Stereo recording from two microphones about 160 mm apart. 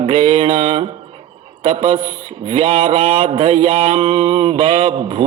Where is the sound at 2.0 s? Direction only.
30° right (ahead or behind).